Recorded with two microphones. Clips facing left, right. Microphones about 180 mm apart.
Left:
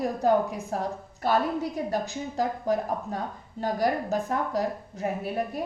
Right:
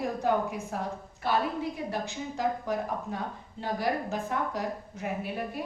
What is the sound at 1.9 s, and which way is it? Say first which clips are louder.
A woman's voice: left 4 dB; 40° left (ahead or behind).